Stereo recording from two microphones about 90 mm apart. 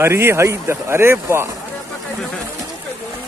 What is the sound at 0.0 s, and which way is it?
Speech, 25° right (ahead or behind).